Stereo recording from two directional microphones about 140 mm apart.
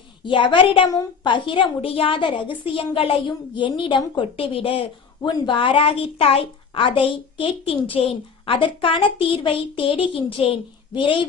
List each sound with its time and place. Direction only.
0.3 s a woman's voice: 35° left (ahead or behind)